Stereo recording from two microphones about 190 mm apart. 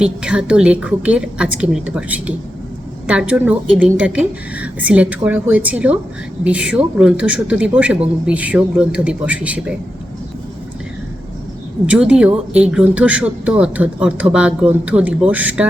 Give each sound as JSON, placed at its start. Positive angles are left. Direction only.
{"t": 0.0, "sound": "a woman's voice", "side_deg": -5}
{"t": 11.9, "sound": "speech", "side_deg": -5}